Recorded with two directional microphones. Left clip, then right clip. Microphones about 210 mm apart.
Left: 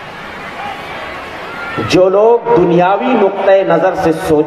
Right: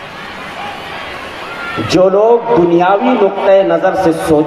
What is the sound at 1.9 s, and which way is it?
A man's voice, 25° left (ahead or behind).